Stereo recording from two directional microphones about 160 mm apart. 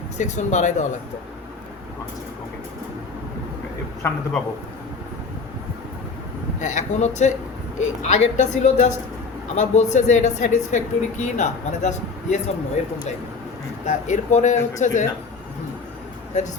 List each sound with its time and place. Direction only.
0.2 s speech: 50° left (ahead or behind)
4.0 s a man's voice: 15° left (ahead or behind)
6.6 s speech: 50° left (ahead or behind)
13.8 s speech: 45° left (ahead or behind)